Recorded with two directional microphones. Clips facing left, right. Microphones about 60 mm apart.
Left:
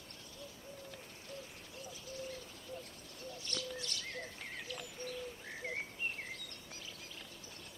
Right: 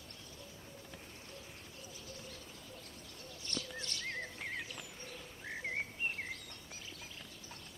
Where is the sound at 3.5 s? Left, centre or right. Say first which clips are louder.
Even; right.